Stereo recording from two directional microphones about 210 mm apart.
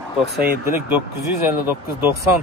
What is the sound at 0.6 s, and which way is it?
Speech, 10° right (ahead or behind).